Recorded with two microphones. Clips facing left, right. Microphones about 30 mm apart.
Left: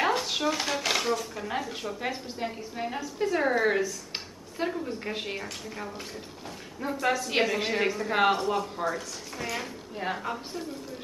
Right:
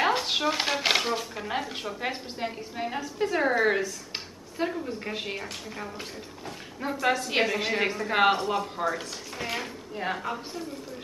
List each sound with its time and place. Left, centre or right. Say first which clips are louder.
0.0 s speech: right 1 dB; right
2.5 s a woman's voice: right 1 dB; centre